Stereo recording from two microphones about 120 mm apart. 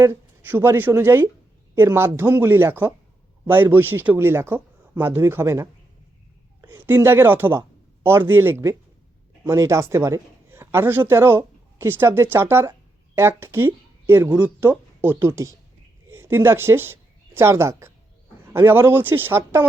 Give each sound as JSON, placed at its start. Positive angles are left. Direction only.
{"t": 0.0, "sound": "a woman's voice", "side_deg": -20}
{"t": 15.3, "sound": "speech", "side_deg": -25}